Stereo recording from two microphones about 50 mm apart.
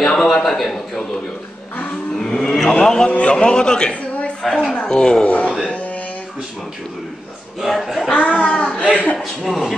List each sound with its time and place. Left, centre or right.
0.0 s a man's voice: centre
2.1 s music: centre
2.8 s speech: centre
3.1 s a man's voice: left
5.2 s speech: left
7.6 s a man's voice: centre
8.1 s speech: left
9.2 s a man's voice: centre